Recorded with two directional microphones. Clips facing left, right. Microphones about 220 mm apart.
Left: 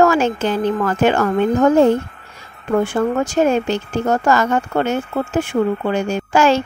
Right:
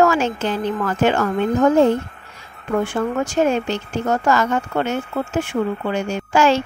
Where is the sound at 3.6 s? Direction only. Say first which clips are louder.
Left 3 dB; 45° left (ahead or behind).